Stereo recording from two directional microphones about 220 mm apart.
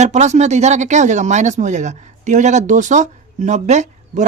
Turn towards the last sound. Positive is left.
turn(degrees=-30)  # may be behind; listen again after turning